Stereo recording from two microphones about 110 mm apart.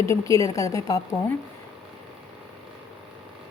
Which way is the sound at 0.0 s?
30° left (ahead or behind).